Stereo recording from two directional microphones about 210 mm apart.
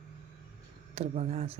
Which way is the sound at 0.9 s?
30° right (ahead or behind).